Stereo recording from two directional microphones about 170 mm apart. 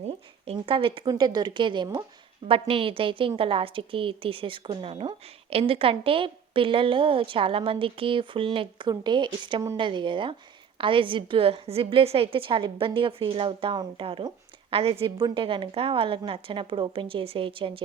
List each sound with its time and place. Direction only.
0.0 s a woman's voice: 35° right (ahead or behind)